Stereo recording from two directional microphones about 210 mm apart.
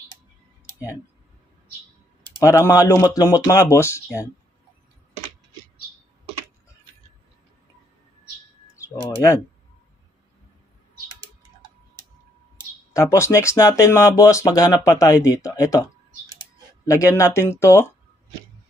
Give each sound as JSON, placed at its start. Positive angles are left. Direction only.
{"t": 2.2, "sound": "speech", "side_deg": 15}
{"t": 12.9, "sound": "speech", "side_deg": 15}
{"t": 16.8, "sound": "speech", "side_deg": 15}